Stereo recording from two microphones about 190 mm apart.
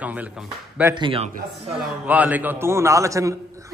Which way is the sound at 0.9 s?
25° right (ahead or behind).